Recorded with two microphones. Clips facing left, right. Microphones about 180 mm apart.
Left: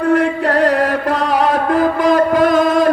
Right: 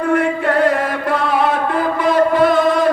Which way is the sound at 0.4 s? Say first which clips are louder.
Left 2 dB; 35° left (ahead or behind).